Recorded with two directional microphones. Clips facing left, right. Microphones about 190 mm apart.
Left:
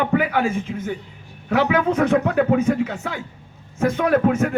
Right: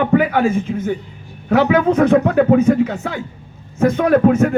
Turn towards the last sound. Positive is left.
turn(degrees=-40)  # may be behind; listen again after turning